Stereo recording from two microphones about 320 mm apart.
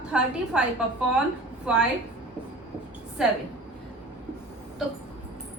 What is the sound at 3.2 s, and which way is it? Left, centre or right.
Speech, centre.